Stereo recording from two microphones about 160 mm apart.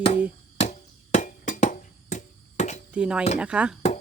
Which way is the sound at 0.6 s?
45° left (ahead or behind).